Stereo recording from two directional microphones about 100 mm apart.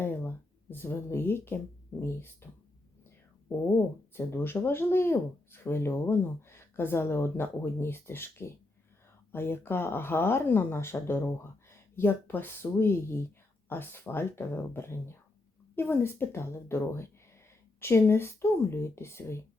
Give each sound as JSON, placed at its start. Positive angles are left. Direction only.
{"t": 0.0, "sound": "speech", "side_deg": 20}
{"t": 3.6, "sound": "speech", "side_deg": 25}